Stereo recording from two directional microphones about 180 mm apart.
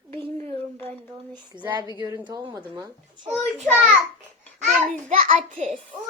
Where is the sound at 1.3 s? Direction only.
25° right (ahead or behind).